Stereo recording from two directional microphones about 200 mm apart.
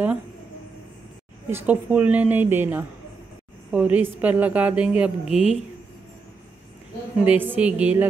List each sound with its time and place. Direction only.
1.5 s a woman's voice: 5° right (ahead or behind)
5.2 s a woman's voice: 30° left (ahead or behind)
7.2 s a woman's voice: 10° right (ahead or behind)